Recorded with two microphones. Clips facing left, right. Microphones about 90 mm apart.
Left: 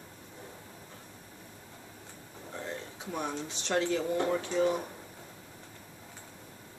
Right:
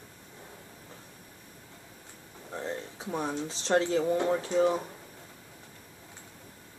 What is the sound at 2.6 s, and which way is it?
Speech, 35° right (ahead or behind).